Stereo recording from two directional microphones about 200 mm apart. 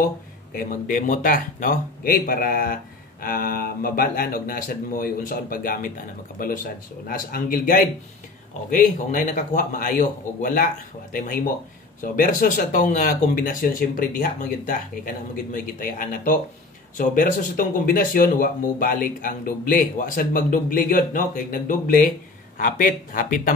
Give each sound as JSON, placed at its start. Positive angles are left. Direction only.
{"t": 0.6, "sound": "speech", "side_deg": 40}